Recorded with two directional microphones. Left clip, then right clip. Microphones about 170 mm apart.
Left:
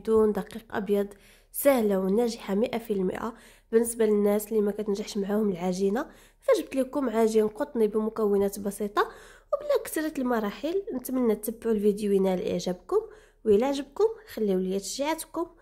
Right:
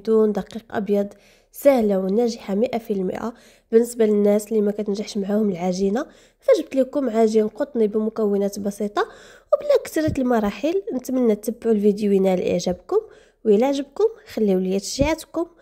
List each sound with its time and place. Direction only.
0.0 s a woman's voice: 20° right (ahead or behind)
9.5 s a woman's voice: 30° right (ahead or behind)
14.3 s a woman's voice: 35° right (ahead or behind)